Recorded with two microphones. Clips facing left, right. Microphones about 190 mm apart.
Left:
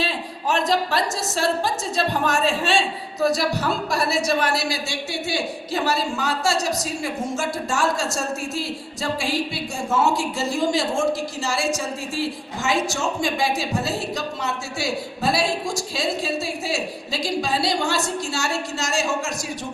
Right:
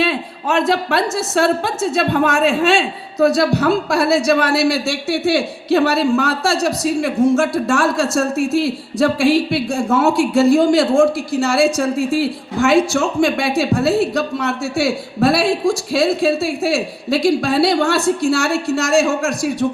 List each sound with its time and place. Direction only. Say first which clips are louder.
0.0 s a woman's voice: right 7 dB; 60° right (ahead or behind)